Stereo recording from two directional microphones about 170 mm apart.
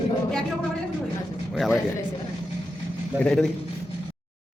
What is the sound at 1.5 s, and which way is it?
Speech, 5° right (ahead or behind).